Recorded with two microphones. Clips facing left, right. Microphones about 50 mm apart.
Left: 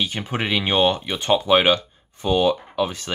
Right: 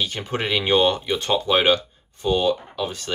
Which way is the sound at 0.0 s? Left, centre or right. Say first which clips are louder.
Left 1 dB; centre.